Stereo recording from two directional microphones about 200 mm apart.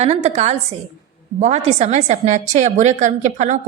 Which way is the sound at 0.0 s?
30° right (ahead or behind).